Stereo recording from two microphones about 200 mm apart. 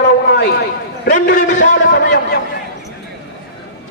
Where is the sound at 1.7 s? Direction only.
60° left (ahead or behind).